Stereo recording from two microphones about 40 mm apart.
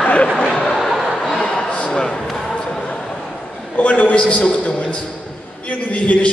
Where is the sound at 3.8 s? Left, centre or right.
Left.